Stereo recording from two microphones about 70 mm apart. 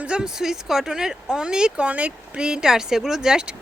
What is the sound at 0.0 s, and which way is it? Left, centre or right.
Speech, centre.